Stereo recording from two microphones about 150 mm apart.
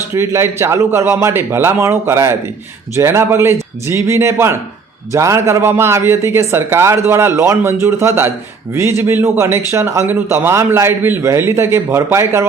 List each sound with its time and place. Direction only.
0.1 s speech: 15° right (ahead or behind)